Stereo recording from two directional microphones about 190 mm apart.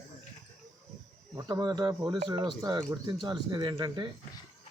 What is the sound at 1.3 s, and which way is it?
Speech, 20° right (ahead or behind).